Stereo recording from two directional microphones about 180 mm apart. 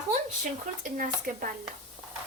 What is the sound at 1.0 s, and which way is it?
Speech, 50° right (ahead or behind).